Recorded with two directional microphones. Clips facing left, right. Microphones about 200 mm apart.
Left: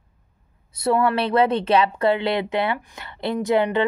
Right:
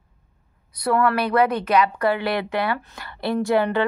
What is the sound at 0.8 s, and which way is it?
Speech, 25° left (ahead or behind).